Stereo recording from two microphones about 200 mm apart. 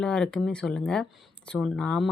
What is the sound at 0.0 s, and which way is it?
A woman's voice, 5° left (ahead or behind).